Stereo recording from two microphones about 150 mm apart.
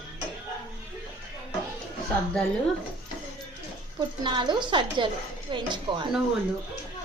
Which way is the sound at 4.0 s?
30° right (ahead or behind).